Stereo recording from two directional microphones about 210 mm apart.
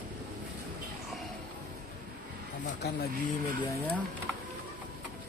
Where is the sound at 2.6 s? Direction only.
50° left (ahead or behind).